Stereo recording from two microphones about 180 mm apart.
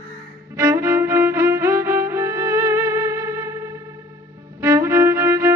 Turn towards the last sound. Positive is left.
turn(degrees=-20)  # may be behind; listen again after turning